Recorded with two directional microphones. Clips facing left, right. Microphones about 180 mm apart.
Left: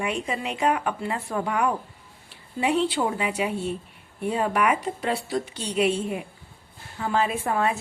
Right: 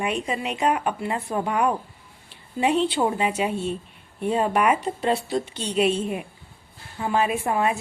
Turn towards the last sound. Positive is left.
turn(degrees=-15)  # may be behind; listen again after turning